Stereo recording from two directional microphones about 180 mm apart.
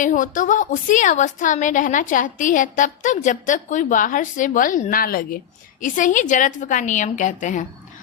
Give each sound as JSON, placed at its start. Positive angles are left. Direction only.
{"t": 0.0, "sound": "a woman's voice", "side_deg": 45}